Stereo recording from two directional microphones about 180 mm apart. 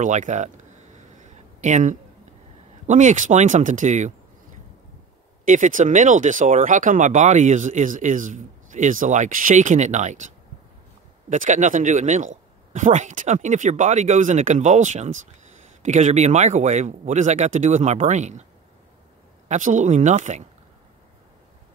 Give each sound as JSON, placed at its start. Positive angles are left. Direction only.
{"t": 0.0, "sound": "speech", "side_deg": -45}
{"t": 1.1, "sound": "a sound", "side_deg": -40}
{"t": 2.9, "sound": "speech", "side_deg": -45}
{"t": 5.4, "sound": "speech", "side_deg": -45}
{"t": 19.4, "sound": "speech", "side_deg": -45}